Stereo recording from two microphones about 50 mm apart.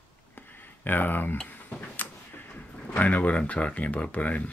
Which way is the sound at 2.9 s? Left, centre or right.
Left.